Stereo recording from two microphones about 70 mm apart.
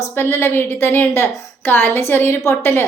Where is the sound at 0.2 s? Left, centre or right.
Left.